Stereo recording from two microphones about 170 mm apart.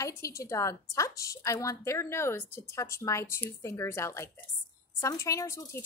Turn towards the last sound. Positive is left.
turn(degrees=15)  # may be behind; listen again after turning